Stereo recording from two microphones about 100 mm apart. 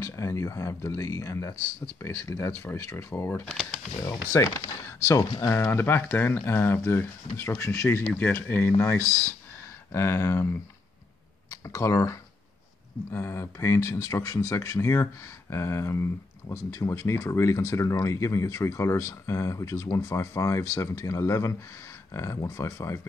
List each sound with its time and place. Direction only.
0.0 s speech: 30° left (ahead or behind)
8.0 s speech: 15° left (ahead or behind)
11.6 s speech: 35° left (ahead or behind)